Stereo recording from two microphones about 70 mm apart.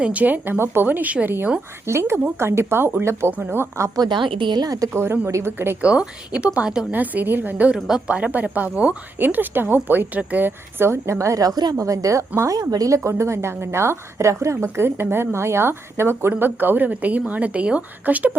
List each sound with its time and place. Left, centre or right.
0.0 s speech: right
1.9 s a woman's voice: right
3.3 s speech: right
3.6 s speech: right
3.9 s a woman's voice: right
4.9 s a woman's voice: right
5.8 s speech: centre
7.7 s a woman's voice: centre; by 13.0 s right
13.1 s a woman's voice: right